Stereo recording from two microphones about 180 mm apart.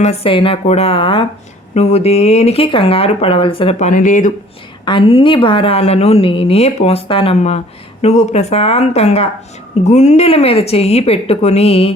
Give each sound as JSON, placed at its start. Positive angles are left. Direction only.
{"t": 0.0, "sound": "a woman's voice", "side_deg": 35}
{"t": 4.9, "sound": "a woman's voice", "side_deg": 30}